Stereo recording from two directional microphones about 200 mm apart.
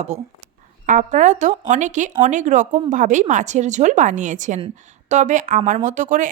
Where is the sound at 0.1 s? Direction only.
35° right (ahead or behind).